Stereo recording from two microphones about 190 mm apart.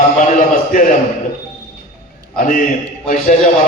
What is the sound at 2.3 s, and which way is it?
Speech, 45° left (ahead or behind).